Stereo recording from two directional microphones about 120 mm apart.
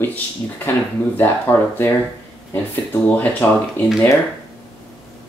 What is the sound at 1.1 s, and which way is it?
Speech, 15° left (ahead or behind).